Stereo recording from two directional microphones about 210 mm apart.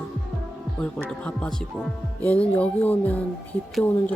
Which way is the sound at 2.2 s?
5° left (ahead or behind).